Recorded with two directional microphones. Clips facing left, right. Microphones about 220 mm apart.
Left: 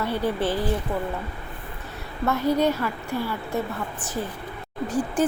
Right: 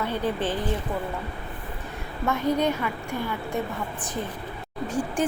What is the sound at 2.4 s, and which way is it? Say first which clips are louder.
Speech: left 2 dB; 10° left (ahead or behind).